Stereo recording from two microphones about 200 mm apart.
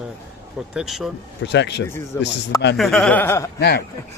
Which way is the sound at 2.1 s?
15° left (ahead or behind).